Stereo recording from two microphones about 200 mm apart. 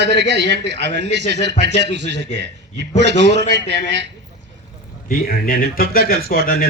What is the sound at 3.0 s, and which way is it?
A man's voice, 60° right (ahead or behind).